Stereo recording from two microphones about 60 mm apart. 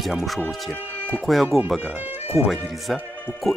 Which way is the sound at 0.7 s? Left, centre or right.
Left.